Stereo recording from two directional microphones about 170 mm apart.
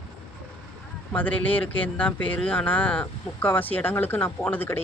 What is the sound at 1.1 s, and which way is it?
Speech, 10° left (ahead or behind).